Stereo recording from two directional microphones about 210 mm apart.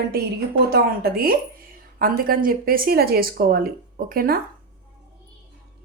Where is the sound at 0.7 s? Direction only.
45° right (ahead or behind).